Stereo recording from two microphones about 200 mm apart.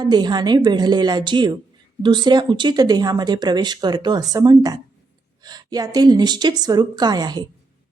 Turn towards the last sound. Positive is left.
turn(degrees=-20)  # may be behind; listen again after turning